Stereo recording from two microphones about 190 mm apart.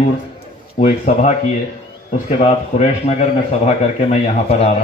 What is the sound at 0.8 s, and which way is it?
Speech, 35° left (ahead or behind).